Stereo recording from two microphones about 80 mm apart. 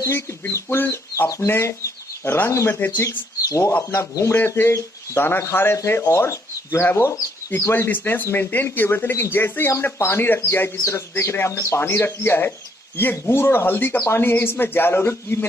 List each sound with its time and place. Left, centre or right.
0.0 s speech: left
3.0 s speech: left
7.7 s speech: left